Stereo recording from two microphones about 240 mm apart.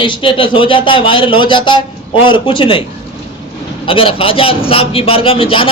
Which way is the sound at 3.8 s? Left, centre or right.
Left.